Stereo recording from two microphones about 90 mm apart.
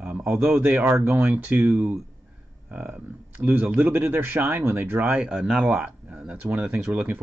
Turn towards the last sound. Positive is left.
turn(degrees=-15)  # may be behind; listen again after turning